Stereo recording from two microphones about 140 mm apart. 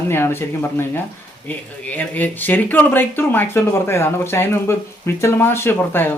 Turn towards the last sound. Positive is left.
turn(degrees=15)  # may be behind; listen again after turning